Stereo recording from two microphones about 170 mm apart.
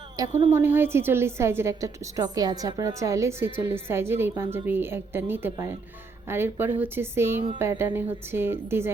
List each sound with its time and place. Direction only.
0.2 s a woman's voice: 20° right (ahead or behind)